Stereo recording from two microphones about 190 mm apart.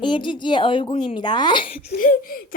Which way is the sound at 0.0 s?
25° left (ahead or behind).